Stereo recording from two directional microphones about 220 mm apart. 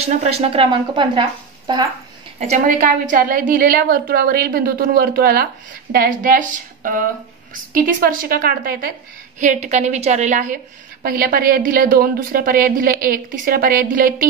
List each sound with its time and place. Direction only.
0.0 s speech: 30° right (ahead or behind)
2.4 s a woman's voice: 35° right (ahead or behind)